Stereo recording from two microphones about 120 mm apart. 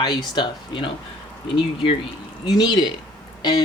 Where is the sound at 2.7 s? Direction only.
40° left (ahead or behind).